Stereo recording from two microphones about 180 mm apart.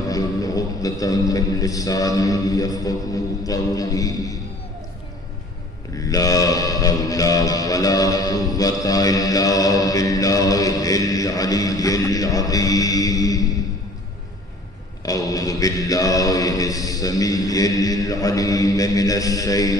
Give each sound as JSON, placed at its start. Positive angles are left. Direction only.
{"t": 0.1, "sound": "a man's voice", "side_deg": 20}
{"t": 3.4, "sound": "mantra", "side_deg": 20}
{"t": 5.9, "sound": "mantra", "side_deg": 20}
{"t": 15.0, "sound": "mantra", "side_deg": 20}